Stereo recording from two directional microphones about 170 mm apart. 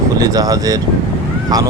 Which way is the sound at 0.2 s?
20° right (ahead or behind).